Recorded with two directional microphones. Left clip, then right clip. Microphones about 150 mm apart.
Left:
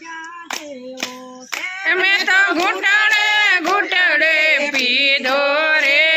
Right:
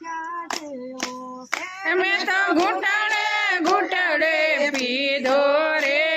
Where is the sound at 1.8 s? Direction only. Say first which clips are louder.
Left 6 dB; 25° right (ahead or behind).